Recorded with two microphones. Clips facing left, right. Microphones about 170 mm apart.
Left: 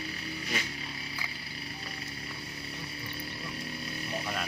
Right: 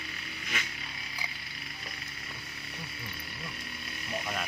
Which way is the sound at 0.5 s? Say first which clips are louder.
Left 2 dB; 35° left (ahead or behind).